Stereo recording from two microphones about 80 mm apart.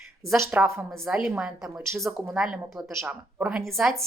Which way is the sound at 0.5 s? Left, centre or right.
Right.